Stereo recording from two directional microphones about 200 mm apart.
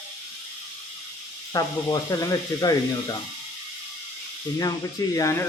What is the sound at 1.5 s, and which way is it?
Speech, 20° left (ahead or behind).